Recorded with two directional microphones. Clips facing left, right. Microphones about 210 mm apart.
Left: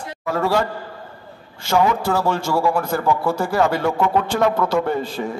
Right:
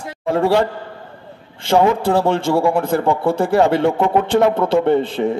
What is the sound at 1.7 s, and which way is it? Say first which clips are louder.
A man's voice: right 4 dB; 30° right (ahead or behind).